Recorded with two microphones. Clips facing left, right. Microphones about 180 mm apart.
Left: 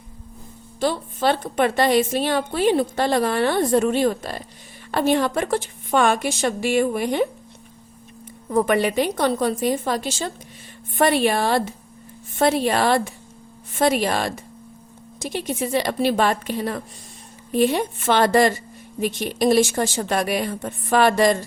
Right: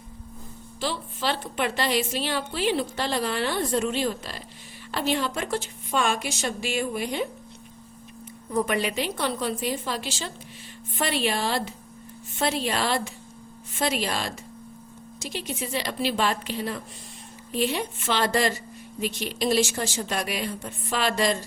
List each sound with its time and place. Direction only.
0.8 s a woman's voice: 50° left (ahead or behind)
8.4 s a woman's voice: 55° left (ahead or behind)